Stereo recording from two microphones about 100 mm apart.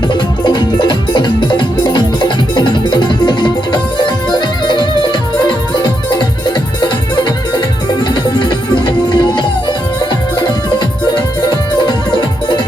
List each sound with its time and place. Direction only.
0.1 s music: 50° left (ahead or behind)